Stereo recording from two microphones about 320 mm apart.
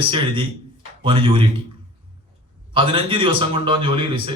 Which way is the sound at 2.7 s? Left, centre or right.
Centre.